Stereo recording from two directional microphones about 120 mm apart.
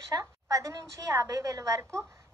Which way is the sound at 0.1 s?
30° right (ahead or behind).